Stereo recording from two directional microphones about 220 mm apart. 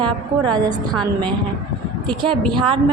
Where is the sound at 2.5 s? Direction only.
20° right (ahead or behind).